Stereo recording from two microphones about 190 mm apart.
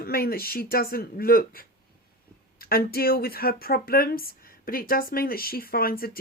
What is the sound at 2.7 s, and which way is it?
Speech, 55° left (ahead or behind).